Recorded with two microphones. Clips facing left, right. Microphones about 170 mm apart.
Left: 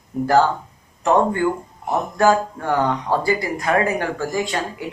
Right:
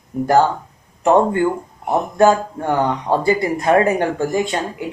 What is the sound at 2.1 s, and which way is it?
Speech, 20° right (ahead or behind).